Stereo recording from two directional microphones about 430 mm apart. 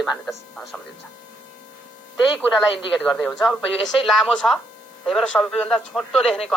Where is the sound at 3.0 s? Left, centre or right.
Centre.